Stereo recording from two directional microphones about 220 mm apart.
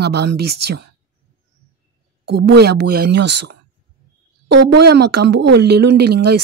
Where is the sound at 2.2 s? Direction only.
50° right (ahead or behind).